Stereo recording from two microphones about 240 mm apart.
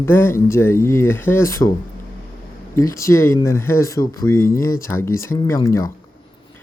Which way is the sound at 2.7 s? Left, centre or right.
Centre.